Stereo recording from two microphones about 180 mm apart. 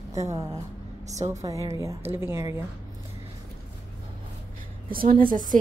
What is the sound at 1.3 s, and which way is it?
A woman's voice, 15° right (ahead or behind).